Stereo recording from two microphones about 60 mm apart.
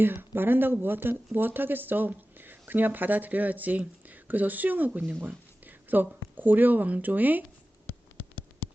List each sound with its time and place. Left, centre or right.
0.0 s speech: right
5.2 s a sound: right
6.3 s speech: right